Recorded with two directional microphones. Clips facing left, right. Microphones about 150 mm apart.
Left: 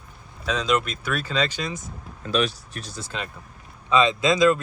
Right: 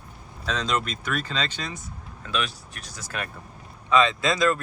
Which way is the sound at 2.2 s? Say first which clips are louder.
Left 6 dB; 35° left (ahead or behind).